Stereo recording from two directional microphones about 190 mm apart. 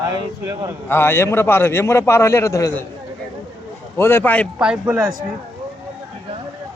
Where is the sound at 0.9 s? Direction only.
10° left (ahead or behind).